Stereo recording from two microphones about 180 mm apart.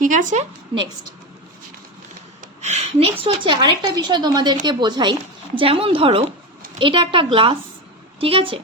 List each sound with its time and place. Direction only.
0.0 s a woman's voice: 45° right (ahead or behind)
0.7 s speech: 30° right (ahead or behind)
2.4 s a woman's voice: 40° right (ahead or behind)